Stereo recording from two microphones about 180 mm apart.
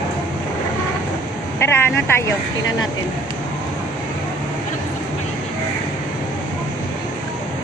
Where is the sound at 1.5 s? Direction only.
15° left (ahead or behind).